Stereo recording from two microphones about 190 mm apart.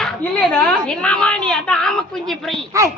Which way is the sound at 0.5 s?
5° left (ahead or behind).